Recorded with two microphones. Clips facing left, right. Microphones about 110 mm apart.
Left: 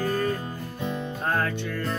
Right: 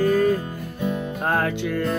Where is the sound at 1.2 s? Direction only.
70° right (ahead or behind).